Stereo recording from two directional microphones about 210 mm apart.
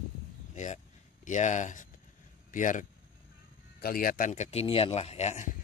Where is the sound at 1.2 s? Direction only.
35° left (ahead or behind).